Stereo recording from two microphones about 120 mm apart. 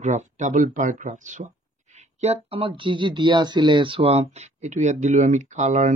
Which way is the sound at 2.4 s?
50° right (ahead or behind).